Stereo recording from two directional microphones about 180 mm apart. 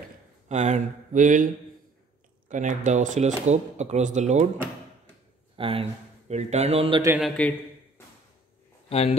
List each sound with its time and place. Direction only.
0.5 s speech: 40° right (ahead or behind)
5.6 s a man's voice: 30° right (ahead or behind)
7.2 s a man's voice: 5° left (ahead or behind)
8.8 s a sound: 35° left (ahead or behind)